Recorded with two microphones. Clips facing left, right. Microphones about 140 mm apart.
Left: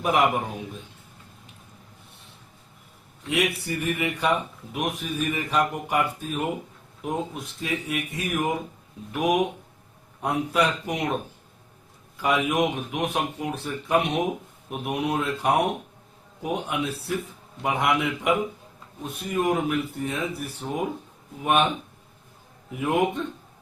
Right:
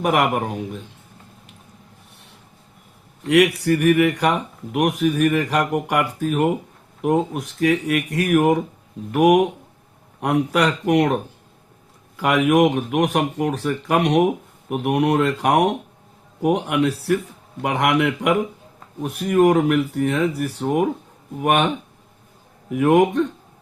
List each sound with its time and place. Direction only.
0.0 s speech: 70° right (ahead or behind)
3.2 s speech: 70° right (ahead or behind)
22.7 s speech: 65° right (ahead or behind)